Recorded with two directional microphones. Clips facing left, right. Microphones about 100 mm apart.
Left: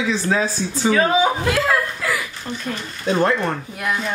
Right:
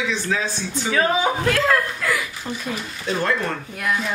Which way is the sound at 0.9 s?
Centre (ahead or behind).